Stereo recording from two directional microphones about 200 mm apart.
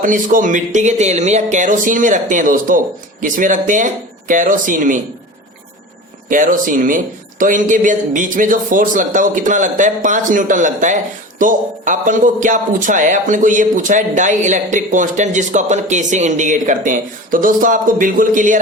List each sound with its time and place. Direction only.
0.0 s speech: 40° right (ahead or behind)
6.2 s speech: 40° right (ahead or behind)